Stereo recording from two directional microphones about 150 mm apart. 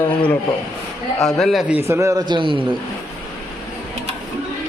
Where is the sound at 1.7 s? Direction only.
15° right (ahead or behind); by 2.8 s 35° right (ahead or behind).